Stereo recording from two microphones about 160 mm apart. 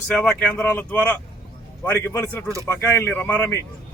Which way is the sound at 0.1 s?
5° left (ahead or behind).